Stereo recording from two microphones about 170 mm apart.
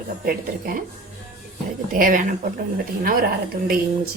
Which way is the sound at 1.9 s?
50° right (ahead or behind).